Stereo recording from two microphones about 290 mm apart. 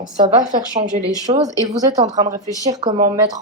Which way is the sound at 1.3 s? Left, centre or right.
Centre.